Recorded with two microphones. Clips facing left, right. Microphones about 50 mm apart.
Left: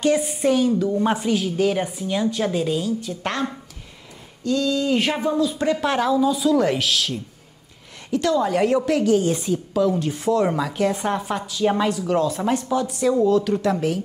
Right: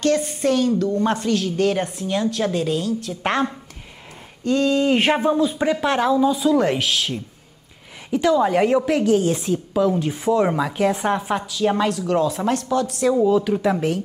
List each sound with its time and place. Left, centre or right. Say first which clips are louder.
0.0 s a woman's voice: even; centre
3.2 s a woman's voice: right 4 dB; right
4.5 s speech: right 3 dB; right
5.6 s a woman's voice: right 1 dB; centre
13.2 s a woman's voice: even; centre